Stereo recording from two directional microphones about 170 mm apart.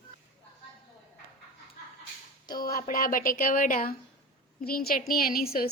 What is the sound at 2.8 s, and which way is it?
Speech, 55° left (ahead or behind).